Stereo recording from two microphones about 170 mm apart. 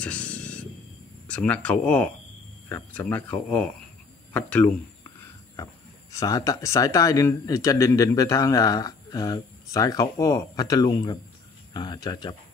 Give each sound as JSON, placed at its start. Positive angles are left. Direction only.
{"t": 0.0, "sound": "a sound", "side_deg": 5}
{"t": 1.2, "sound": "speech", "side_deg": 5}
{"t": 6.1, "sound": "speech", "side_deg": 20}